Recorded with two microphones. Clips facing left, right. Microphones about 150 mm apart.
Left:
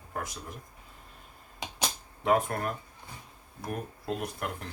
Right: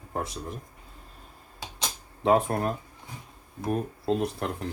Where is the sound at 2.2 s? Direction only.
30° right (ahead or behind).